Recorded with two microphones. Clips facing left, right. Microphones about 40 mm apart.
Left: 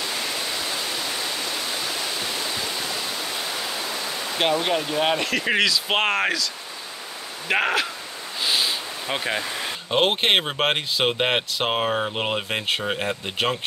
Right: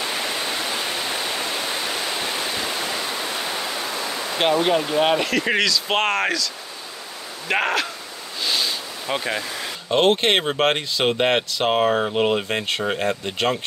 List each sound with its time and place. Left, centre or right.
0.0 s pink noise: right
4.4 s speech: centre
8.4 s speech: centre